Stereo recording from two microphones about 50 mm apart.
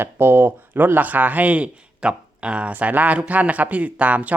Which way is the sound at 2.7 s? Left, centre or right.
Right.